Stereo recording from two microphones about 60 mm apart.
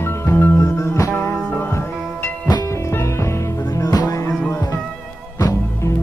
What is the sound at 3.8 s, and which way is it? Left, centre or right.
Music, left.